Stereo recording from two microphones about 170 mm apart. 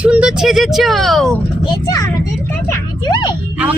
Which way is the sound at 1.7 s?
20° left (ahead or behind).